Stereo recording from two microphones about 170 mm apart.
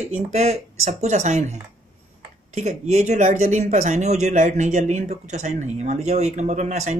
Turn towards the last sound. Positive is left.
turn(degrees=-45)  # may be behind; listen again after turning